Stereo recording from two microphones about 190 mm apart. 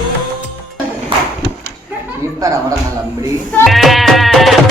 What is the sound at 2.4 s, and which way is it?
Speech, 15° right (ahead or behind).